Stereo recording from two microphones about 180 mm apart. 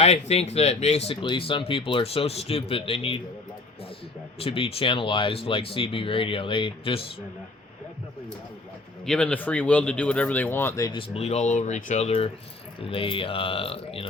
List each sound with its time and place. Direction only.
0.0 s speech: 35° left (ahead or behind)
4.4 s speech: 30° left (ahead or behind)
9.0 s speech: 5° left (ahead or behind)
10.9 s speech: 35° left (ahead or behind)